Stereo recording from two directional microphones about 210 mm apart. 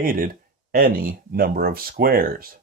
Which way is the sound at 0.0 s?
45° right (ahead or behind).